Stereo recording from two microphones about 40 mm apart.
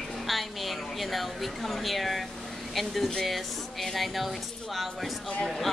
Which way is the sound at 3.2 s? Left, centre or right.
Centre.